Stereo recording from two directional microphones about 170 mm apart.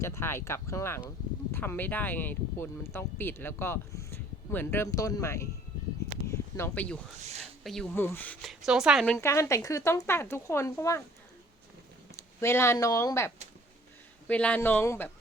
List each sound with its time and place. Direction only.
0.0 s speech: 15° left (ahead or behind)
6.2 s a sound: 15° left (ahead or behind)
7.6 s speech: 5° left (ahead or behind)
9.1 s speech: 15° left (ahead or behind)
12.1 s speech: 15° left (ahead or behind)